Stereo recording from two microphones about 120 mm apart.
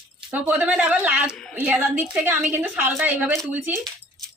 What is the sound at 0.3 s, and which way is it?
Speech, 10° right (ahead or behind).